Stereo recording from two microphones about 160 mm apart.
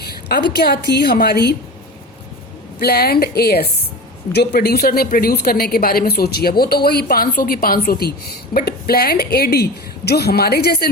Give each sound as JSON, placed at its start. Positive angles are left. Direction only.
{"t": 0.0, "sound": "a woman's voice", "side_deg": 80}
{"t": 2.8, "sound": "a woman's voice", "side_deg": 80}
{"t": 4.3, "sound": "a woman's voice", "side_deg": 90}